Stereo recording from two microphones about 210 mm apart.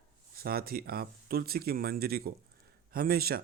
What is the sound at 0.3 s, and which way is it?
Speech, 45° right (ahead or behind).